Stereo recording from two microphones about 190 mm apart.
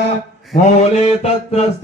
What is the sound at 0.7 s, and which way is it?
Mantra, 35° left (ahead or behind).